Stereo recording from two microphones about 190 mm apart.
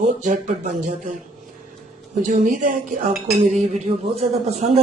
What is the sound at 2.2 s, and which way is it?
A man's voice, 40° right (ahead or behind).